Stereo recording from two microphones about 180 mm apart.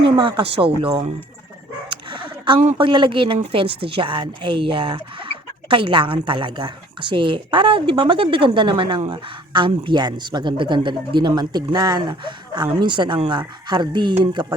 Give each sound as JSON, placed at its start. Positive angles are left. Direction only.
{"t": 0.2, "sound": "speech", "side_deg": -25}
{"t": 1.9, "sound": "dog", "side_deg": -25}
{"t": 2.7, "sound": "speech", "side_deg": -25}